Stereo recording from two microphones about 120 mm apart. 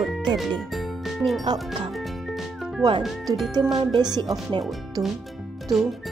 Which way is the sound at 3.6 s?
40° right (ahead or behind).